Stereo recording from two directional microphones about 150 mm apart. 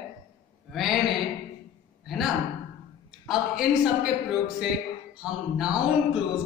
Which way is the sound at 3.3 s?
5° right (ahead or behind).